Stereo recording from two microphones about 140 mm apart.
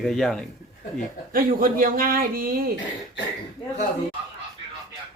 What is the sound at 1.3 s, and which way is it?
Speech, 90° right.